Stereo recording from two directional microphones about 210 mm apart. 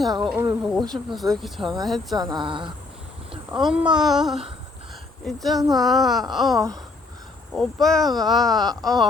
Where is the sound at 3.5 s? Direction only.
5° right (ahead or behind).